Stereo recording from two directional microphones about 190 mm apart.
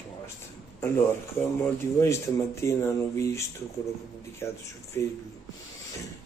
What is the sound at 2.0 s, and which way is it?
A man's voice, 15° left (ahead or behind).